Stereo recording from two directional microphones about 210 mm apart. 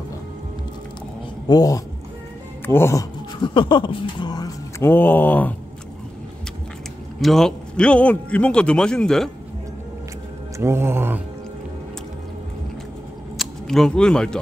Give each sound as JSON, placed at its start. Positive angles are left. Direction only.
{"t": 1.5, "sound": "speech", "side_deg": 15}
{"t": 7.2, "sound": "a man's voice", "side_deg": 0}
{"t": 10.6, "sound": "speech", "side_deg": -10}
{"t": 13.4, "sound": "speech", "side_deg": 0}